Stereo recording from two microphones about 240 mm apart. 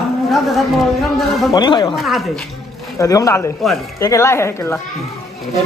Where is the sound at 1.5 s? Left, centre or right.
Centre.